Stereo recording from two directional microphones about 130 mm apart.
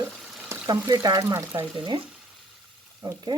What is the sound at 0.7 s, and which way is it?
Speech, 30° right (ahead or behind).